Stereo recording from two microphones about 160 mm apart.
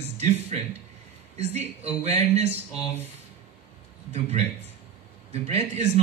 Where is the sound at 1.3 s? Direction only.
40° right (ahead or behind).